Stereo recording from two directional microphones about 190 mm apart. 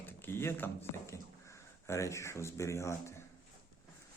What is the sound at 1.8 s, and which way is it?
Speech, 15° left (ahead or behind).